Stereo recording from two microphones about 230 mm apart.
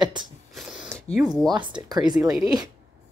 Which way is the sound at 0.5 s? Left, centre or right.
Centre.